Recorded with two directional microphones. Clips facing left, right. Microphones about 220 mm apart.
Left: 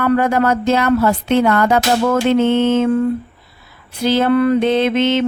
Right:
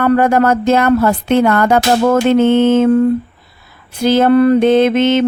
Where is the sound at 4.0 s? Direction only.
50° right (ahead or behind).